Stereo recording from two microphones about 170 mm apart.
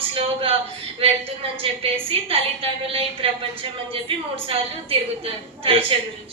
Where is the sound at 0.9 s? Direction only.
35° right (ahead or behind).